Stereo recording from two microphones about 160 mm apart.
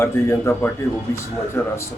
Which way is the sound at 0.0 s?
15° left (ahead or behind).